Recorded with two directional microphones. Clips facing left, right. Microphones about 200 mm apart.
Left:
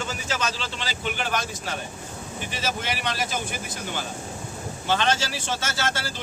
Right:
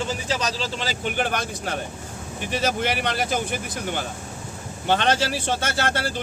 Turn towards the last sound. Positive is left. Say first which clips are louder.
# right 4 dB
turn(degrees=-60)  # may be behind; listen again after turning